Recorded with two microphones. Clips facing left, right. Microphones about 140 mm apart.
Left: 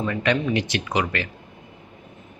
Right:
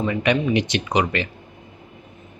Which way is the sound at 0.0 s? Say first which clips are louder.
Right 2 dB; 10° right (ahead or behind).